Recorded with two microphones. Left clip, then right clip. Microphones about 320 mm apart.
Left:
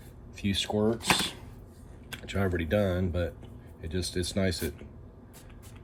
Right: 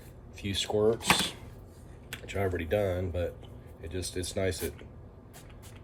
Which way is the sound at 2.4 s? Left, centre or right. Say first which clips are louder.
Left 1 dB; left.